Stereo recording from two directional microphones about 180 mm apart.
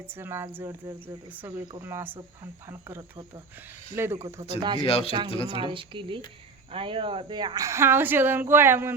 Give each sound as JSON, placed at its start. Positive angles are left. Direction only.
{"t": 0.2, "sound": "a woman's voice", "side_deg": -15}
{"t": 3.9, "sound": "a woman's voice", "side_deg": -15}
{"t": 4.8, "sound": "speech", "side_deg": 30}
{"t": 5.5, "sound": "a woman's voice", "side_deg": -30}